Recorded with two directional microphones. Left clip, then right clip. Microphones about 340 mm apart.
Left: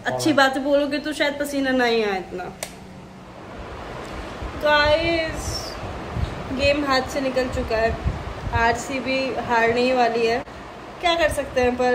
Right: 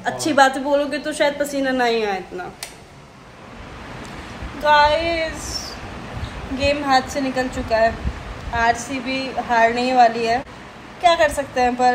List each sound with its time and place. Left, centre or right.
0.0 s a woman's voice: centre
4.6 s a woman's voice: centre
6.6 s a woman's voice: centre